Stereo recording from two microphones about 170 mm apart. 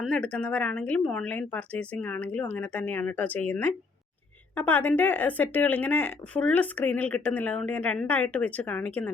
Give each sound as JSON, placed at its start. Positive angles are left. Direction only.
{"t": 0.0, "sound": "speech", "side_deg": 5}